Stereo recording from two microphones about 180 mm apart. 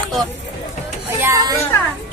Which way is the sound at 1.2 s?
20° right (ahead or behind).